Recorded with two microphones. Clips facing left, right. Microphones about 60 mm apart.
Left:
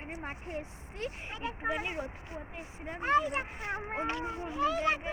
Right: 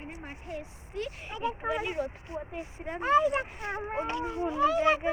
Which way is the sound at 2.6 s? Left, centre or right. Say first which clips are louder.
Right 5 dB; centre.